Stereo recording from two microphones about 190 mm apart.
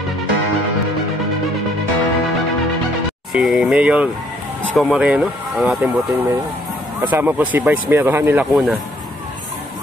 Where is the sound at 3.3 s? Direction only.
Centre (ahead or behind).